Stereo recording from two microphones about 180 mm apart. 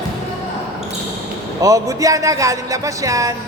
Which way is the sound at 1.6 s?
20° right (ahead or behind).